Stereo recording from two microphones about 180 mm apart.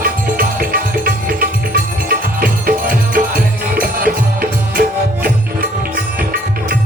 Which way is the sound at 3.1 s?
50° right (ahead or behind).